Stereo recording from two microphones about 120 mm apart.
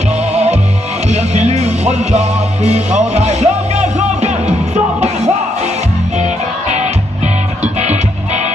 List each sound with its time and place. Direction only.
0.3 s music: 65° right (ahead or behind)
7.6 s music: 70° right (ahead or behind)